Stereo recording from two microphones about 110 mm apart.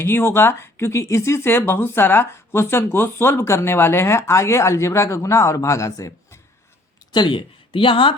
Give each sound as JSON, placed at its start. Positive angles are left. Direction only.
{"t": 0.0, "sound": "speech", "side_deg": 20}
{"t": 7.1, "sound": "speech", "side_deg": 45}